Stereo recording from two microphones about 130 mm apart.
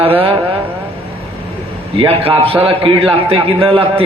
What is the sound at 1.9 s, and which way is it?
A man's voice, 45° right (ahead or behind).